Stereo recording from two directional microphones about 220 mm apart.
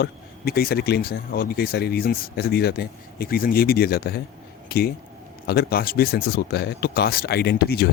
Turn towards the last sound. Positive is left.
turn(degrees=45)  # may be behind; listen again after turning